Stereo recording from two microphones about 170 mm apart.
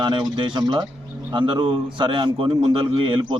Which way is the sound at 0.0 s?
25° right (ahead or behind).